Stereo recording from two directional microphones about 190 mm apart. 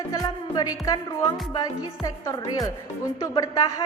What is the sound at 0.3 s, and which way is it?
Music, 20° left (ahead or behind).